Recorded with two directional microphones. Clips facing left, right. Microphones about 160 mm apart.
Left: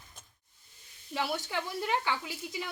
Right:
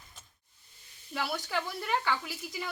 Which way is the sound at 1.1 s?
15° left (ahead or behind).